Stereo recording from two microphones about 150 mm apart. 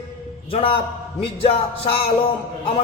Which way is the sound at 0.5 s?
40° left (ahead or behind).